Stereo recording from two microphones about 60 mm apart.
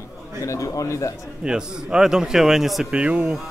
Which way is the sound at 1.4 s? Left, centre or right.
Centre.